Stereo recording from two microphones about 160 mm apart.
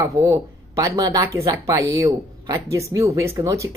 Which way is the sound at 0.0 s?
20° right (ahead or behind).